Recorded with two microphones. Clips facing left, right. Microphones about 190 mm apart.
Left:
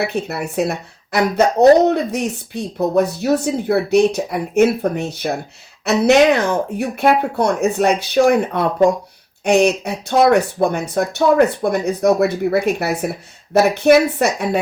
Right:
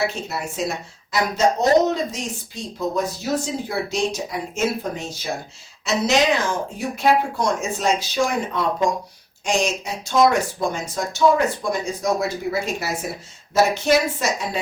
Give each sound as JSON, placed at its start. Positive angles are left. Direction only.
{"t": 0.0, "sound": "speech", "side_deg": 60}